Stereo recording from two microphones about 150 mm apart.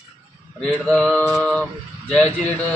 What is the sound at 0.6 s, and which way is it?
A man's voice, 5° left (ahead or behind).